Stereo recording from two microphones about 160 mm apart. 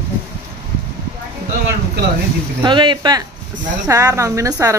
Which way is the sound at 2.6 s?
30° right (ahead or behind).